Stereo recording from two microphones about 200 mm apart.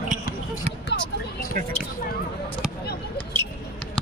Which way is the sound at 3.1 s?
10° left (ahead or behind).